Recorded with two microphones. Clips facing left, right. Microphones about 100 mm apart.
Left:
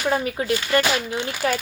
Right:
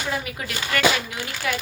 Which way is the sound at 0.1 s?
35° left (ahead or behind).